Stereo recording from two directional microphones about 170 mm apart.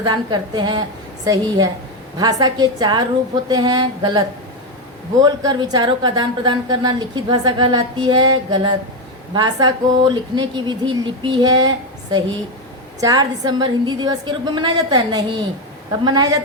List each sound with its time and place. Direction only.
0.0 s a woman's voice: 25° right (ahead or behind)
5.2 s a woman's voice: 25° right (ahead or behind)
13.0 s a woman's voice: 20° right (ahead or behind)